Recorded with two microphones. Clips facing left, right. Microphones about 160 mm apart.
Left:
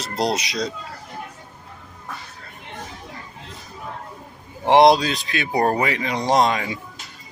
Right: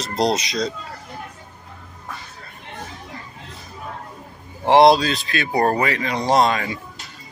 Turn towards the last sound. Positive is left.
turn(degrees=15)  # may be behind; listen again after turning